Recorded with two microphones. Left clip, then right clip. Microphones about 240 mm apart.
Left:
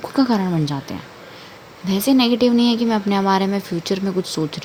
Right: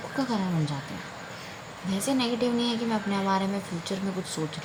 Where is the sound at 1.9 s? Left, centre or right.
Left.